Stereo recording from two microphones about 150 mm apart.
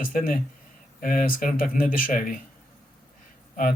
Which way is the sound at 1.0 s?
70° left (ahead or behind).